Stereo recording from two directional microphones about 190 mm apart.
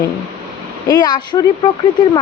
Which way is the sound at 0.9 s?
20° left (ahead or behind).